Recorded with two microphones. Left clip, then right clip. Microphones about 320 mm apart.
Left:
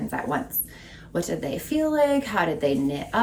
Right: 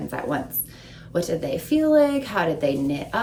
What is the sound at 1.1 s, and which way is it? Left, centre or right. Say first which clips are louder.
A woman's voice: right 3 dB; centre.